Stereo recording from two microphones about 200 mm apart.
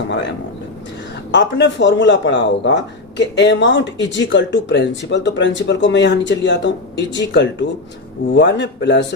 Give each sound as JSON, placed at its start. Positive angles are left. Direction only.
{"t": 1.3, "sound": "speech", "side_deg": 65}